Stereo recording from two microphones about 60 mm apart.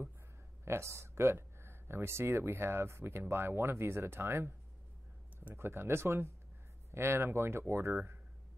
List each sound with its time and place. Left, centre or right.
0.7 s speech: right